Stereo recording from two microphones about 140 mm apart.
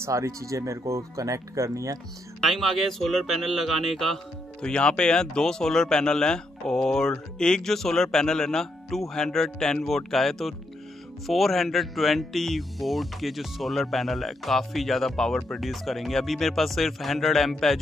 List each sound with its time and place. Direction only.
0.0 s speech: 20° right (ahead or behind)
2.4 s speech: centre (ahead or behind)